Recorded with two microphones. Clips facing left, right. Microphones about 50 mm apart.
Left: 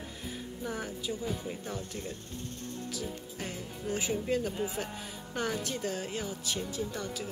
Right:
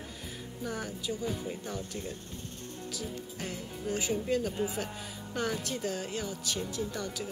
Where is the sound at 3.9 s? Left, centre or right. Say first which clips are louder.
Even; centre.